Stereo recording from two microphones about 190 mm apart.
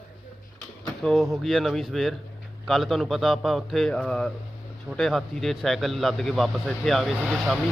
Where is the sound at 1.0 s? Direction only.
Centre (ahead or behind).